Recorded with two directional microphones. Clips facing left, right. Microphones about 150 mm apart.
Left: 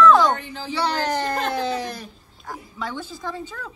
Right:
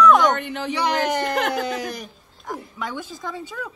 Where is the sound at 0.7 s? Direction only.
15° right (ahead or behind).